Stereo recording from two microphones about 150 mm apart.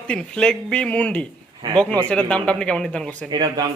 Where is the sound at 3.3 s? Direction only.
30° right (ahead or behind).